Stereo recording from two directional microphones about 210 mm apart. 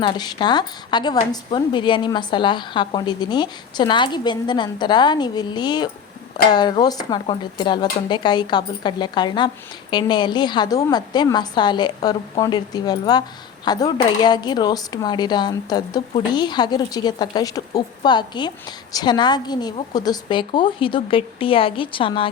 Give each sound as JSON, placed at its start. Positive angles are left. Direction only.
{"t": 0.0, "sound": "speech", "side_deg": 20}